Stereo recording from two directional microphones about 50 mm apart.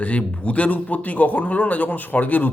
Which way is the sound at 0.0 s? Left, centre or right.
Left.